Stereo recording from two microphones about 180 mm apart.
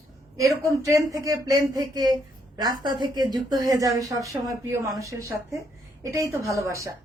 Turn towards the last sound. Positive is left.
turn(degrees=-15)  # may be behind; listen again after turning